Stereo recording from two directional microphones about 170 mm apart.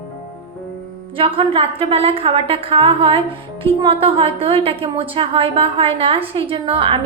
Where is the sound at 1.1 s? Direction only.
35° right (ahead or behind).